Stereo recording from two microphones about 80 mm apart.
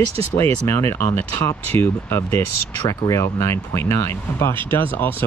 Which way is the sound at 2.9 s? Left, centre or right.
Left.